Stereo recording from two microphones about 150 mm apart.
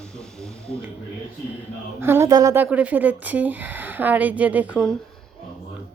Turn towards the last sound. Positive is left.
turn(degrees=-10)  # may be behind; listen again after turning